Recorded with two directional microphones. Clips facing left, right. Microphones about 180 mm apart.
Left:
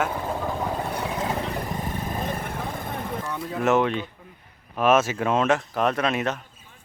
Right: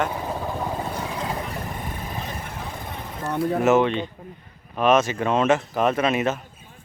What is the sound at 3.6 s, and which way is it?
Speech, centre (ahead or behind).